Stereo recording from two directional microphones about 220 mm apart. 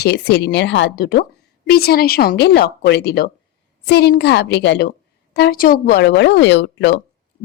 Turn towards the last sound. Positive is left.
turn(degrees=50)  # may be behind; listen again after turning